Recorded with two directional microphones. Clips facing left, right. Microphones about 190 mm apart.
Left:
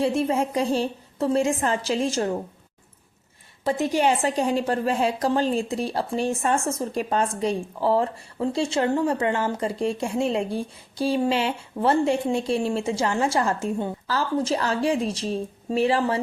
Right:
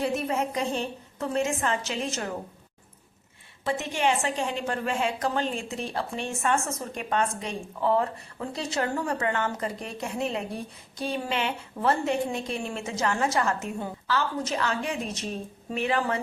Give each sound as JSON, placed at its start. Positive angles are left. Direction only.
{"t": 0.0, "sound": "a woman's voice", "side_deg": 30}
{"t": 3.6, "sound": "a woman's voice", "side_deg": 35}